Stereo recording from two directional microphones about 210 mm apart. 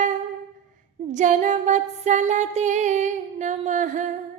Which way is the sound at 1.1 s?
35° right (ahead or behind).